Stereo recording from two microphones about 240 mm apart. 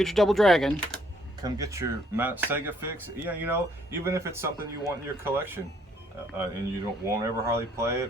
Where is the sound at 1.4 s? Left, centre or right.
Centre.